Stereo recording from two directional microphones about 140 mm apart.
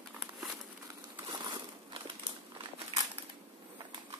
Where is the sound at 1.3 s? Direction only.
30° right (ahead or behind).